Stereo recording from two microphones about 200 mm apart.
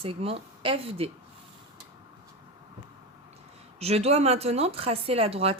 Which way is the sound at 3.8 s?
30° right (ahead or behind).